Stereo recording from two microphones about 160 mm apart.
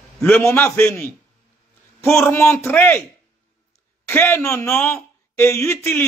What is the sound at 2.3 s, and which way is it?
Speech, 15° left (ahead or behind).